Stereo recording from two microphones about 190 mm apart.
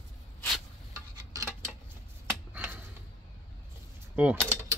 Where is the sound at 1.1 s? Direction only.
15° right (ahead or behind).